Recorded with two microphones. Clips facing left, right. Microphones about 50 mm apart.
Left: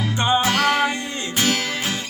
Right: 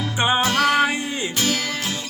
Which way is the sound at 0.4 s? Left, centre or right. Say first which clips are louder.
Right 1 dB; left.